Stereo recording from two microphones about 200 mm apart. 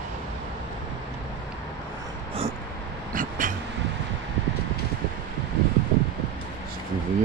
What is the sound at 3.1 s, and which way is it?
Vehicle, 45° right (ahead or behind).